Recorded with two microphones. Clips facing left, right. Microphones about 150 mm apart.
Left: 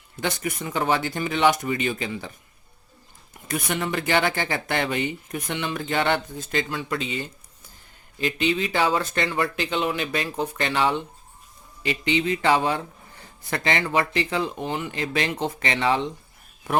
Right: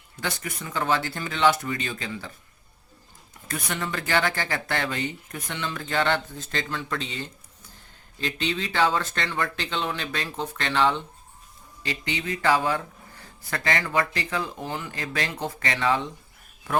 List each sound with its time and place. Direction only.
0.2 s speech: 20° left (ahead or behind)
3.5 s speech: 15° left (ahead or behind)